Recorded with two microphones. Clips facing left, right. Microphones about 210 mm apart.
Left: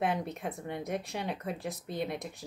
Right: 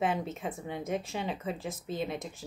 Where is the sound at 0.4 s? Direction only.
Centre (ahead or behind).